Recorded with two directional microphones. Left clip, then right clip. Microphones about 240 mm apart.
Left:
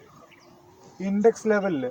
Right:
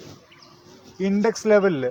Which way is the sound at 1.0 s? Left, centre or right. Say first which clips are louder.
Left 1 dB; right.